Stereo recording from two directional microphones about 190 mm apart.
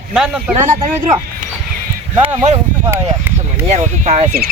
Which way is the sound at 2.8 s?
15° right (ahead or behind).